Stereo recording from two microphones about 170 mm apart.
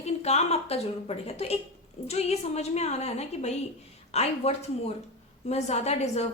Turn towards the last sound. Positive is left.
turn(degrees=40)  # may be behind; listen again after turning